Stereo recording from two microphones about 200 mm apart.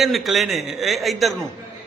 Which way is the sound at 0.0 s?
Centre (ahead or behind).